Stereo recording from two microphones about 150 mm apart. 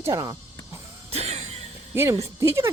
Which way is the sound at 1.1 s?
45° right (ahead or behind).